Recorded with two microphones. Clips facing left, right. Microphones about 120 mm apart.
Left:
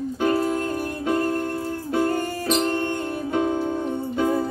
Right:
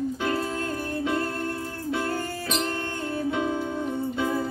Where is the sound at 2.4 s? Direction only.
45° left (ahead or behind).